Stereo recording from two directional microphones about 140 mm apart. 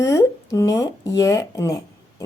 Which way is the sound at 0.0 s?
20° left (ahead or behind).